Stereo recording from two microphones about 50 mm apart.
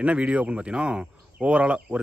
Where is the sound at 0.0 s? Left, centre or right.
Right.